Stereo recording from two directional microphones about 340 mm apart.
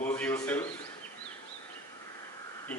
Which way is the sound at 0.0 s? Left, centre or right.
Centre.